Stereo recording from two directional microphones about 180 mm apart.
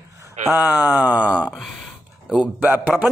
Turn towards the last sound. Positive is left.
turn(degrees=-5)  # may be behind; listen again after turning